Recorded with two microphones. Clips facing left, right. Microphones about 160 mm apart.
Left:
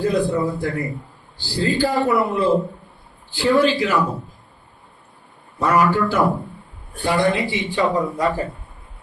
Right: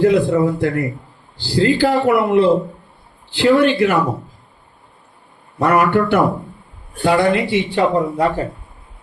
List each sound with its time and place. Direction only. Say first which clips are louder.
0.0 s speech: right 6 dB; 65° right (ahead or behind)
5.5 s speech: right 3 dB; 65° right (ahead or behind)